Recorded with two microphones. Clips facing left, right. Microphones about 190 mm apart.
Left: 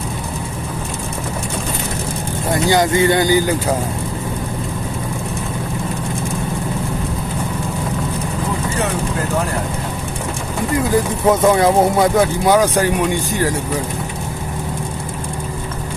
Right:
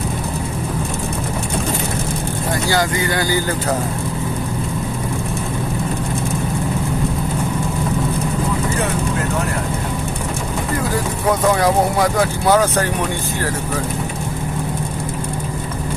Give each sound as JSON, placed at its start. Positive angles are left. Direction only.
{"t": 2.6, "sound": "speech", "side_deg": 20}
{"t": 11.3, "sound": "speech", "side_deg": 25}